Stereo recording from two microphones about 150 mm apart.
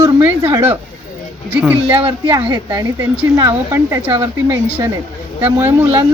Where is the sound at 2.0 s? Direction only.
30° right (ahead or behind).